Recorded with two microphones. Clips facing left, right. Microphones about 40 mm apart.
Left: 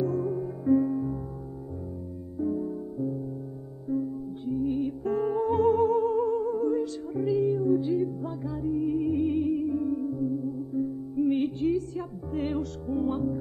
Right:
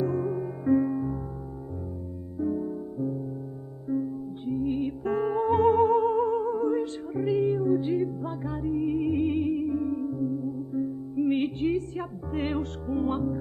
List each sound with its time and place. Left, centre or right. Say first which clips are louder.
0.0 s music: even; right
2.3 s music: even; centre
11.3 s music: even; right